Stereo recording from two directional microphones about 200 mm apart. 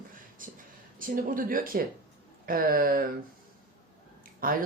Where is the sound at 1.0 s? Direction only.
45° right (ahead or behind).